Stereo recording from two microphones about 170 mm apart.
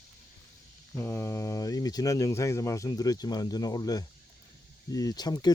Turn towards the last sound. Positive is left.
turn(degrees=25)  # may be behind; listen again after turning